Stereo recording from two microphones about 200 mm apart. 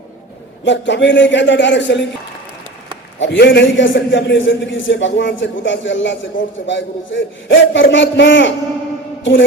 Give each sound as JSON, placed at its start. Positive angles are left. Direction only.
{"t": 0.6, "sound": "a man's voice", "side_deg": 65}
{"t": 3.2, "sound": "a man's voice", "side_deg": 65}